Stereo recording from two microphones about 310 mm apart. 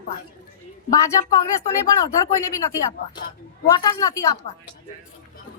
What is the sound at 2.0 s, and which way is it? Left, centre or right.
Speech, centre.